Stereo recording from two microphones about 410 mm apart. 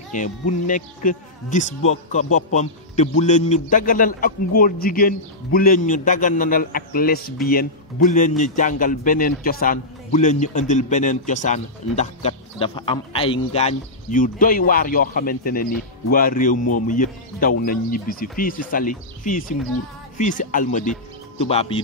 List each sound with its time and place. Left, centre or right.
0.1 s a man's voice: centre